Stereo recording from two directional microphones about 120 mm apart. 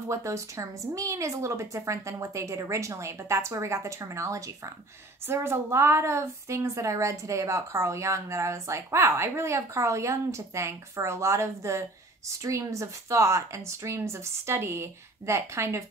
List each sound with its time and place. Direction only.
0.1 s a woman's voice: 25° right (ahead or behind)